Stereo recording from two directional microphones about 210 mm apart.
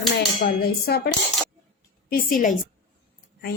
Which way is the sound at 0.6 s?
45° left (ahead or behind).